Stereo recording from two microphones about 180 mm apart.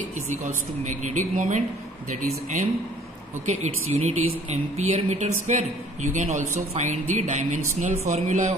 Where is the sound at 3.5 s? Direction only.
40° right (ahead or behind).